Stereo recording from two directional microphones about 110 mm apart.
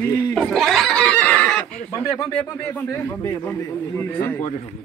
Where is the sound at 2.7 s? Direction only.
25° left (ahead or behind).